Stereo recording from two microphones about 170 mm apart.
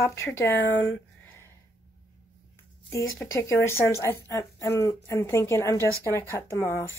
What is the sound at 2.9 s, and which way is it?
Speech, 15° left (ahead or behind).